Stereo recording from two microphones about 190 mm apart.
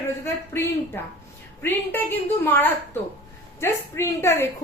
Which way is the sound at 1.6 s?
10° left (ahead or behind).